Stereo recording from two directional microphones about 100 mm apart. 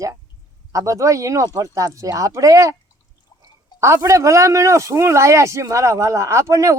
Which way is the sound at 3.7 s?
30° right (ahead or behind).